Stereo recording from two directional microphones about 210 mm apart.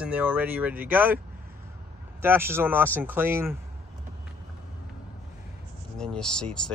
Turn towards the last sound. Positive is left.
turn(degrees=5)  # may be behind; listen again after turning